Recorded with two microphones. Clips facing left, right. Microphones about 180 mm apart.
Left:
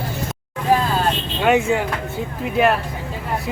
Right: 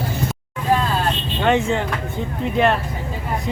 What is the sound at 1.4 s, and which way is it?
Speech, 10° left (ahead or behind).